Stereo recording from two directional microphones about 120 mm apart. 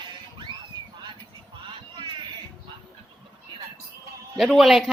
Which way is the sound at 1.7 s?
40° right (ahead or behind).